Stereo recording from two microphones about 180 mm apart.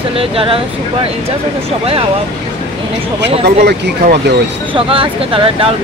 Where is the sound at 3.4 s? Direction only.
65° right (ahead or behind).